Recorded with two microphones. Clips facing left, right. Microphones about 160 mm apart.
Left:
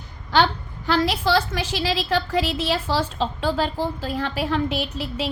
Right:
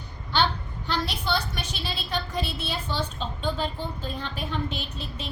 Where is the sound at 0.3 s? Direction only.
90° left.